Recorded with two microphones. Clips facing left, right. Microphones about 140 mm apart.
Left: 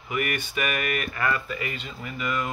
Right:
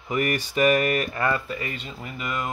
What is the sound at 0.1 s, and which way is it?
Speech, 35° right (ahead or behind).